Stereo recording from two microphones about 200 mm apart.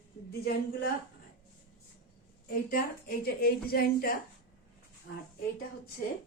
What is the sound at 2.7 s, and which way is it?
Speech, 45° left (ahead or behind).